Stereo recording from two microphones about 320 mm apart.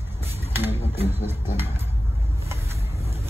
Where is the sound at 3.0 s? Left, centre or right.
Centre.